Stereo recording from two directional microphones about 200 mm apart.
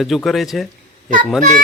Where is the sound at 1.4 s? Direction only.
40° right (ahead or behind).